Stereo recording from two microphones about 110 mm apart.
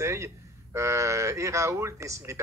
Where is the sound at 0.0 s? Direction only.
25° right (ahead or behind).